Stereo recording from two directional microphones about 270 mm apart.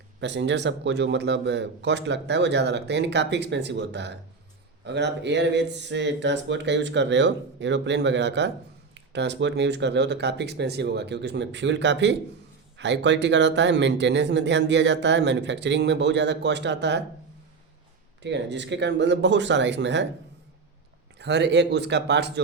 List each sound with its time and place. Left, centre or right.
0.2 s speech: right
18.2 s speech: right
21.2 s speech: right